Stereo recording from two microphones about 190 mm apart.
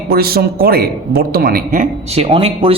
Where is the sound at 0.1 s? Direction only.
55° right (ahead or behind).